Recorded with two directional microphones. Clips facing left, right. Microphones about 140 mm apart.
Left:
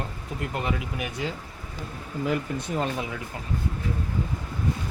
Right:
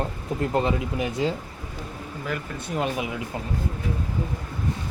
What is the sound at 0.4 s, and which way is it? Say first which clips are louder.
Speech: right 6 dB; 30° right (ahead or behind).